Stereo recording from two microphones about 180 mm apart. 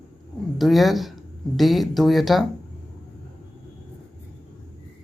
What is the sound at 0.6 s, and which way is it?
Speech, centre (ahead or behind).